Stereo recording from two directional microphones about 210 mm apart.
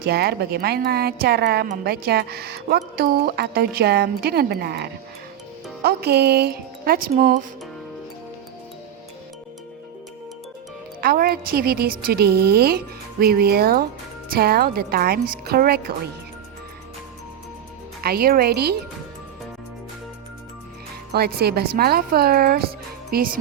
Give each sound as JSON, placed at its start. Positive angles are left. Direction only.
{"t": 0.0, "sound": "speech", "side_deg": -50}
{"t": 11.0, "sound": "speech", "side_deg": -45}
{"t": 18.0, "sound": "speech", "side_deg": -45}
{"t": 21.1, "sound": "speech", "side_deg": -50}